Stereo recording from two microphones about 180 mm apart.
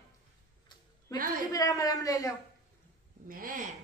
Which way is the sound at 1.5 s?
20° left (ahead or behind).